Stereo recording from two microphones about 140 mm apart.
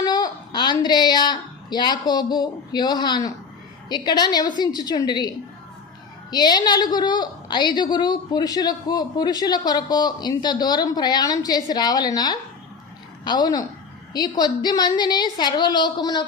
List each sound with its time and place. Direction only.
0.0 s a woman's voice: 30° left (ahead or behind)
6.3 s a woman's voice: 30° left (ahead or behind)